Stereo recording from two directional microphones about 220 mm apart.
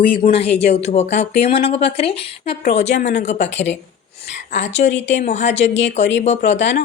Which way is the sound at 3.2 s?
30° left (ahead or behind).